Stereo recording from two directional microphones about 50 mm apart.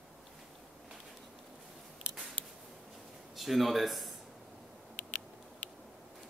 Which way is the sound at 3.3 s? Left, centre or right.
Centre.